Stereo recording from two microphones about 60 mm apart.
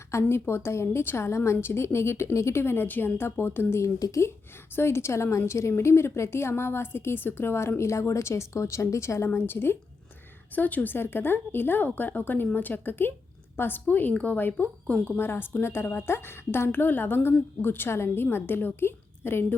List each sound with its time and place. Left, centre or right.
0.1 s a woman's voice: left
10.5 s a woman's voice: left
10.9 s a woman's voice: left
14.3 s a woman's voice: left